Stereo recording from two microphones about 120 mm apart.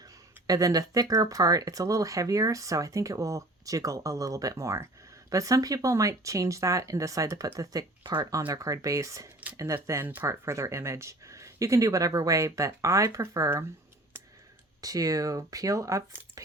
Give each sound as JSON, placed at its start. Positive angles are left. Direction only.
{"t": 0.0, "sound": "speech", "side_deg": -30}
{"t": 14.8, "sound": "speech", "side_deg": -30}